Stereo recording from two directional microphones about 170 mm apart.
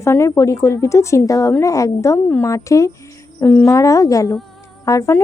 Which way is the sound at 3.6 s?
20° left (ahead or behind).